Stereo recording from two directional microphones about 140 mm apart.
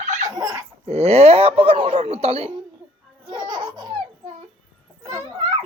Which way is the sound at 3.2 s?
35° right (ahead or behind).